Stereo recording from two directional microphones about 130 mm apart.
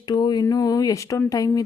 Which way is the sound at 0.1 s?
35° left (ahead or behind).